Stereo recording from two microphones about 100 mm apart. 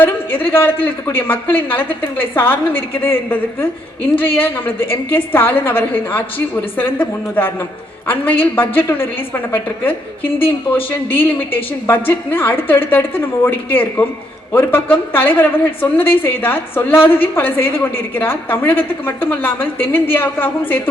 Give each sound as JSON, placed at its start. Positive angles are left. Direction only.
{"t": 0.0, "sound": "speech", "side_deg": 20}
{"t": 10.7, "sound": "speech", "side_deg": 20}